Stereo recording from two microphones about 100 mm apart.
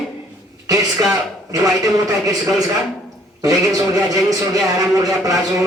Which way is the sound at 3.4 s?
35° right (ahead or behind).